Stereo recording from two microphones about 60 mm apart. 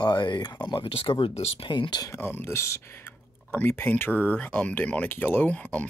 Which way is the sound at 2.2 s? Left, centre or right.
Left.